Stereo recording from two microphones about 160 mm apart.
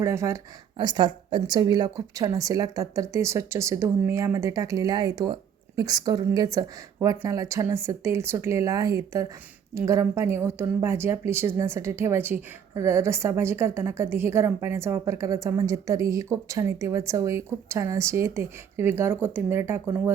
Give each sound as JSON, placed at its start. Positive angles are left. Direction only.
{"t": 0.0, "sound": "a woman's voice", "side_deg": -15}